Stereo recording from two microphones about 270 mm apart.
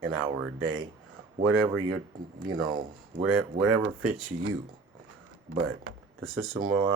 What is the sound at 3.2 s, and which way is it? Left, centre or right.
Speech, right.